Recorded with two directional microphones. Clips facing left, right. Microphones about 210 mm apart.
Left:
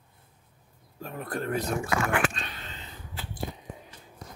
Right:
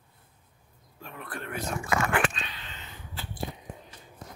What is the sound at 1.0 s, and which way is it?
Speech, 40° left (ahead or behind).